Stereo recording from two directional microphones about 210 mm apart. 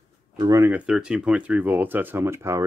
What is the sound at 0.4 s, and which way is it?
Speech, 15° right (ahead or behind).